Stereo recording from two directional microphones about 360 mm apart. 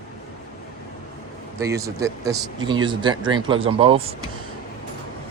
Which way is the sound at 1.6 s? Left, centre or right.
Centre.